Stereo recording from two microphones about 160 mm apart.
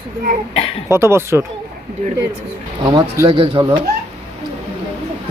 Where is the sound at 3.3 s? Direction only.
35° right (ahead or behind).